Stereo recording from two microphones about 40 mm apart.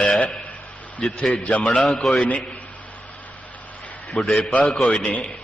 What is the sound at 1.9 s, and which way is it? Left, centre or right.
Speech, centre.